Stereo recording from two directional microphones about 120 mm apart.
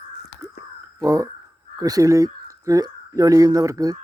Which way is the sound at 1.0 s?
25° right (ahead or behind).